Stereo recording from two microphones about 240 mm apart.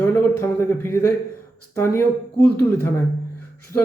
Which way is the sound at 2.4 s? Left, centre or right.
Left.